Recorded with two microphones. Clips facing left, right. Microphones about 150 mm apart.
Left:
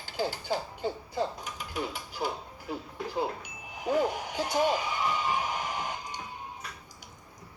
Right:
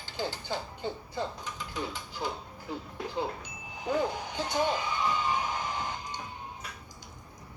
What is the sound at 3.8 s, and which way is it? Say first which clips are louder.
Speech: left 2 dB; 10° left (ahead or behind).